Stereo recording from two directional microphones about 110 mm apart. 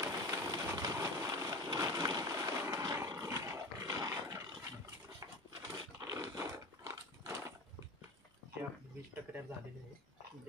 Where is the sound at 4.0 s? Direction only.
30° right (ahead or behind).